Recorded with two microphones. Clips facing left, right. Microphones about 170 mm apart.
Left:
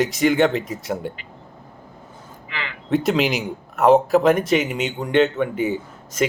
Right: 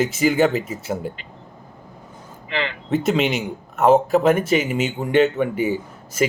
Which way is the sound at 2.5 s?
25° right (ahead or behind).